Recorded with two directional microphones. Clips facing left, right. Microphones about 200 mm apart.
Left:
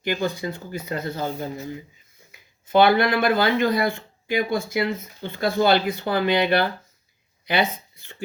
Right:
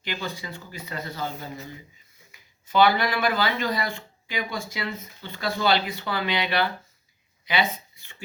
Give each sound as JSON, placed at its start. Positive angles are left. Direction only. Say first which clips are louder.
{"t": 0.0, "sound": "speech", "louder": "left 8 dB", "side_deg": 50}
{"t": 2.6, "sound": "speech", "louder": "left 4 dB", "side_deg": 50}